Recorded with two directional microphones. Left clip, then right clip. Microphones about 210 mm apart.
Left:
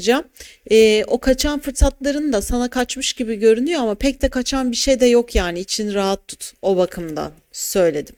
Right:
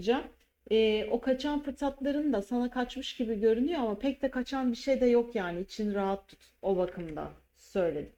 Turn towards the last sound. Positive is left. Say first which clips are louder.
# left 14 dB
turn(degrees=40)  # may be behind; listen again after turning